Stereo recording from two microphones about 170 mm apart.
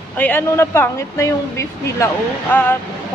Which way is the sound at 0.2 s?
10° left (ahead or behind).